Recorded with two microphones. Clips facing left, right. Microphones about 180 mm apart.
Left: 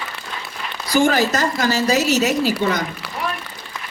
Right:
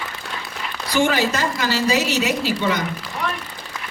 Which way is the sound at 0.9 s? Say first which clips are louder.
Left 3 dB; 40° left (ahead or behind).